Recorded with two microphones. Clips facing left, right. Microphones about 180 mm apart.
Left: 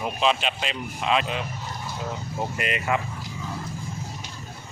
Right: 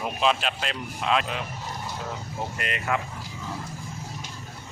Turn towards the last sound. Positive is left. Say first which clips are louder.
# left 2 dB
turn(degrees=5)  # may be behind; listen again after turning